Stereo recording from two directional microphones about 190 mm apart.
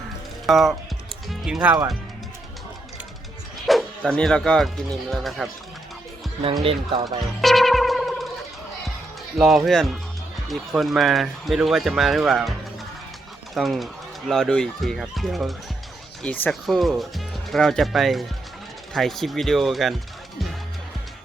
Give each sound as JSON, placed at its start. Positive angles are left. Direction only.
{"t": 0.4, "sound": "speech", "side_deg": 0}
{"t": 3.7, "sound": "speech", "side_deg": 0}
{"t": 6.4, "sound": "speech", "side_deg": -30}
{"t": 7.4, "sound": "music", "side_deg": 0}
{"t": 9.6, "sound": "speech", "side_deg": 0}